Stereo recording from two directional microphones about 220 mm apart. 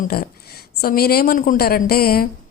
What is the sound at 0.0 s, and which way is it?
A woman's voice, 45° left (ahead or behind).